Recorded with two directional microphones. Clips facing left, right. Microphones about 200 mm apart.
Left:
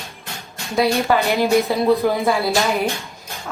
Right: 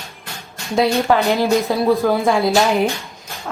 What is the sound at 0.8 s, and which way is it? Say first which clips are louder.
Speech: right 2 dB; centre (ahead or behind).